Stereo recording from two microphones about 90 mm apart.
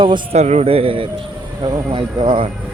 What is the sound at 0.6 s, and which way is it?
Speech, 90° right.